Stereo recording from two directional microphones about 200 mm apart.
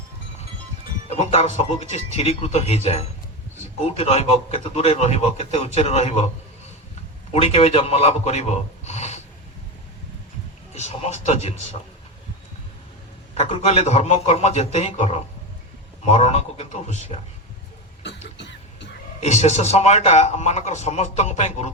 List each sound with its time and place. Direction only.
1.1 s a man's voice: 30° left (ahead or behind)
7.3 s a man's voice: 30° left (ahead or behind)
10.7 s a man's voice: 30° left (ahead or behind)
13.4 s a man's voice: 30° left (ahead or behind)
18.3 s cough: 60° left (ahead or behind)
19.2 s a man's voice: 35° left (ahead or behind)